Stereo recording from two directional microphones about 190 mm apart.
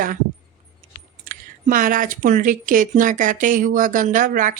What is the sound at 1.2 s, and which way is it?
Speech, 45° right (ahead or behind).